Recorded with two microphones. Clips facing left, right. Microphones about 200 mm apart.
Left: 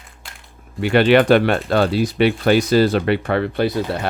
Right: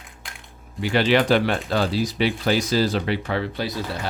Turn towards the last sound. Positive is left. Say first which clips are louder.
# left 8 dB
turn(degrees=60)  # may be behind; listen again after turning